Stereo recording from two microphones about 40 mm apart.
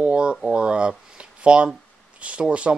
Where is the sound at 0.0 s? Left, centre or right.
Right.